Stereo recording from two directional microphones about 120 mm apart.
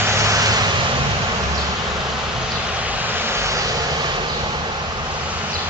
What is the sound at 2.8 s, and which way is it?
Vehicle, 15° right (ahead or behind).